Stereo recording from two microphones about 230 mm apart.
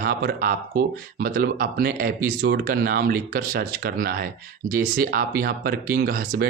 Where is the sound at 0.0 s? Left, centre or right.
Right.